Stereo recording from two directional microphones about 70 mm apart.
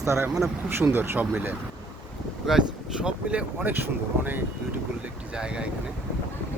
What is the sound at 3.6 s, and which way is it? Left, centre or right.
Speech, right.